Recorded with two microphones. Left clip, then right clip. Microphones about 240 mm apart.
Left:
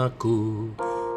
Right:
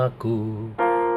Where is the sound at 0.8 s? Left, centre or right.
Right.